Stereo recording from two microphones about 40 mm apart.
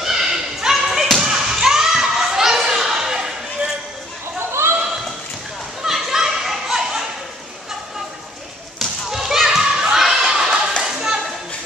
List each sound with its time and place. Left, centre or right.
0.0 s basketball bounce: centre
1.1 s thump: centre
4.5 s a sound: right
5.8 s a sound: centre
8.7 s children playing: centre
10.8 s clapping: centre